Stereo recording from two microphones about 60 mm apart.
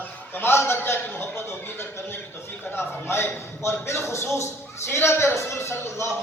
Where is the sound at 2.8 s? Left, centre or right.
Left.